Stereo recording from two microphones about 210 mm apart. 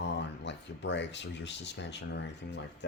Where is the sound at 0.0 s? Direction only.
55° left (ahead or behind).